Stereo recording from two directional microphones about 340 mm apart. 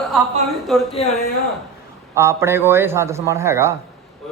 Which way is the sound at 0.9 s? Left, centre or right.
Centre.